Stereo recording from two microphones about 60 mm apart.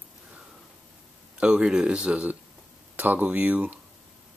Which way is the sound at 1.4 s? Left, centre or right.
Centre.